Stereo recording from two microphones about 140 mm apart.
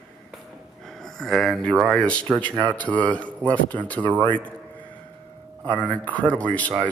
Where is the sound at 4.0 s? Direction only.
35° right (ahead or behind).